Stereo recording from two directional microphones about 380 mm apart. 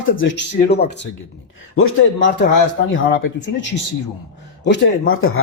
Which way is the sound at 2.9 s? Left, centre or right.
Left.